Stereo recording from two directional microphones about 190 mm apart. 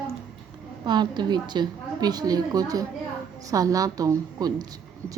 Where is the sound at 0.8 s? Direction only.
25° right (ahead or behind).